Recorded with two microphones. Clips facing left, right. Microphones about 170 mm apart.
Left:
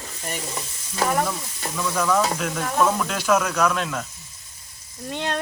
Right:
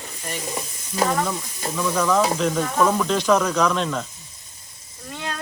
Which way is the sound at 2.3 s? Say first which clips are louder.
Right 3 dB; 5° left (ahead or behind).